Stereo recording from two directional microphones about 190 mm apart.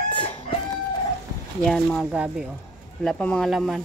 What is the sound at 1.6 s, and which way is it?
A woman's voice, centre (ahead or behind).